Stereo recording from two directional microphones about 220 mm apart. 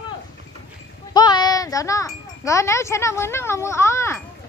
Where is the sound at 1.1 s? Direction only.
20° left (ahead or behind).